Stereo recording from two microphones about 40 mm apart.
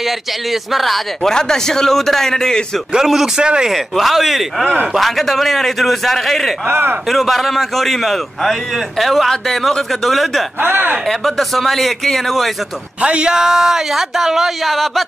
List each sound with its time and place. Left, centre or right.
0.0 s a man's voice: centre
1.3 s a man's voice: centre
2.9 s speech: centre
3.3 s speech: right
3.7 s a man's voice: centre
6.7 s speech: right
7.1 s a man's voice: centre
10.6 s speech: right
11.1 s a man's voice: centre
13.0 s speech: right
13.3 s speech: centre
14.7 s a man's voice: centre